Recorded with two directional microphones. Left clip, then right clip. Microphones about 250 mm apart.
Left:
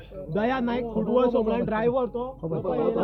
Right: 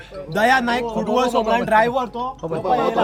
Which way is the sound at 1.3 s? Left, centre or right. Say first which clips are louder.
Right 5 dB; centre.